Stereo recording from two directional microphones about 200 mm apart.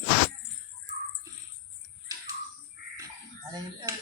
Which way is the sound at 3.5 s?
20° right (ahead or behind).